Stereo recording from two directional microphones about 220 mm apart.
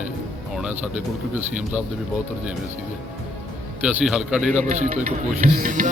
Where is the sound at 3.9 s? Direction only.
5° right (ahead or behind).